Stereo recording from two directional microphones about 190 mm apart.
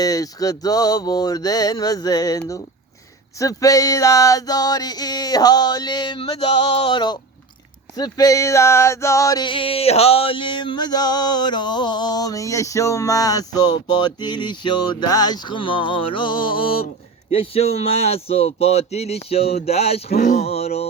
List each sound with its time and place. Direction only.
0.0 s a sound: 20° left (ahead or behind)
17.3 s speech: 30° left (ahead or behind)
20.1 s speech: 45° left (ahead or behind)